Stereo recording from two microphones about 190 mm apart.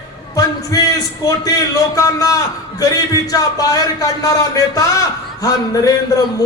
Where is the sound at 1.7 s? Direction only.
15° left (ahead or behind).